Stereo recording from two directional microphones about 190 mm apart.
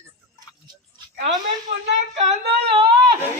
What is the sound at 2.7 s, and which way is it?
Speech, 25° right (ahead or behind).